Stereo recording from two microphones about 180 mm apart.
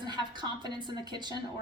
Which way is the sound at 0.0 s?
25° right (ahead or behind).